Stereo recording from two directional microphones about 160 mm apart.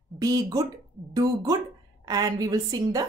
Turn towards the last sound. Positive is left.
turn(degrees=-25)  # may be behind; listen again after turning